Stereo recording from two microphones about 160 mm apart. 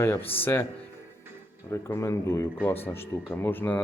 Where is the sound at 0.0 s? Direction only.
15° left (ahead or behind).